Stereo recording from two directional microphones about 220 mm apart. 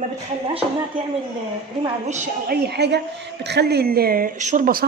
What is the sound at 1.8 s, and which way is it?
A man's voice, 30° right (ahead or behind).